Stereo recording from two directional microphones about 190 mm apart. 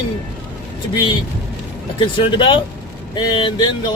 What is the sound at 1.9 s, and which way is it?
Speech, 25° left (ahead or behind).